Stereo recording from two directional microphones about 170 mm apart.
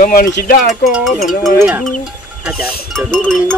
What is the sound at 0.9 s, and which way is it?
Speech, centre (ahead or behind).